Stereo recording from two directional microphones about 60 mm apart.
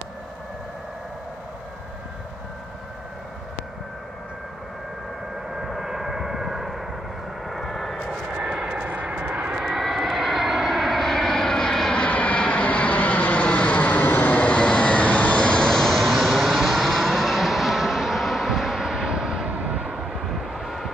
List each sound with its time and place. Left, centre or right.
5.5 s vehicle: centre
8.1 s vehicle: centre
8.8 s vehicle: right; by 15.6 s centre
15.6 s vehicle: centre
19.5 s vehicle: right
20.7 s vehicle: centre